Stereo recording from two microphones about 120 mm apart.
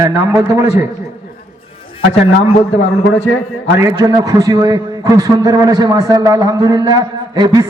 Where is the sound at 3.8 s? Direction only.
30° right (ahead or behind).